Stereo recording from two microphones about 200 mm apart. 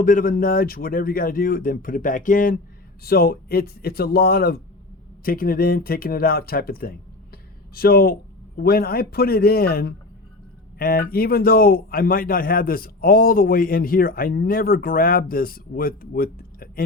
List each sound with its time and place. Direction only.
0.0 s a man's voice: 45° left (ahead or behind)